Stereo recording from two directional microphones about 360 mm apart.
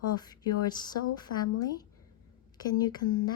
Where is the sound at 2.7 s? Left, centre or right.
Centre.